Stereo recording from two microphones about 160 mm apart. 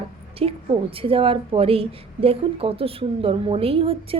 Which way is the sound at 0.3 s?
35° right (ahead or behind).